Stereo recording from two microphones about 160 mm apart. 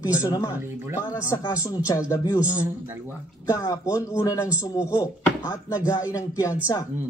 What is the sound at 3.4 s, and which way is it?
A man's voice, 20° left (ahead or behind).